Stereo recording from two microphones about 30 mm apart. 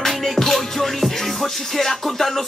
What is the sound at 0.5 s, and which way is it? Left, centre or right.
Music, centre.